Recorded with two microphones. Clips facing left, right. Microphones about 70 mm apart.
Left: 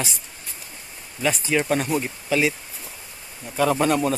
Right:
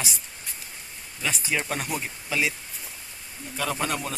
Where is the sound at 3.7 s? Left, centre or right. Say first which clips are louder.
Left 9 dB; centre.